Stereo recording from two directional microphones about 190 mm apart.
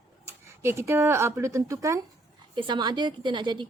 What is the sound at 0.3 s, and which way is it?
A woman's voice, 15° right (ahead or behind).